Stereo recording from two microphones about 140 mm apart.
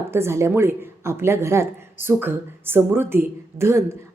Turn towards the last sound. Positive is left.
turn(degrees=-15)  # may be behind; listen again after turning